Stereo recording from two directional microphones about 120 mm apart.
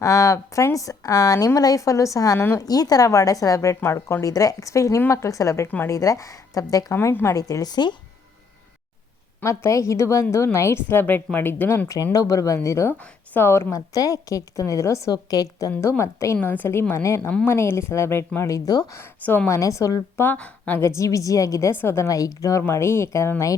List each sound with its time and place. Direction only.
0.0 s a woman's voice: 30° left (ahead or behind)
9.4 s a woman's voice: 25° left (ahead or behind)
12.1 s a woman's voice: 30° left (ahead or behind)
18.9 s speech: 20° left (ahead or behind)
19.5 s a woman's voice: 25° left (ahead or behind)
20.2 s a woman's voice: 15° left (ahead or behind)